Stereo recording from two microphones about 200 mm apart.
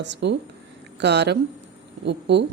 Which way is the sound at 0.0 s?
60° right (ahead or behind).